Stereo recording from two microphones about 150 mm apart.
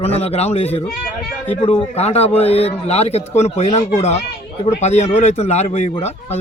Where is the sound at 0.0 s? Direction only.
45° left (ahead or behind).